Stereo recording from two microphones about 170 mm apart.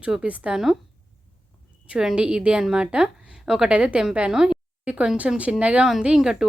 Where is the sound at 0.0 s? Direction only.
5° right (ahead or behind).